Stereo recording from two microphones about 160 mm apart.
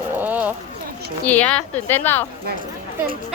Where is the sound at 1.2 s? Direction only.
10° left (ahead or behind).